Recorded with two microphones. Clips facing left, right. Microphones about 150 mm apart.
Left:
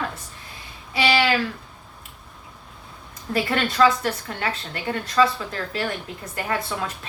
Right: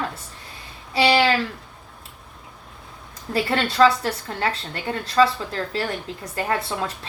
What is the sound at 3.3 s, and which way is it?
A woman's voice, 30° right (ahead or behind).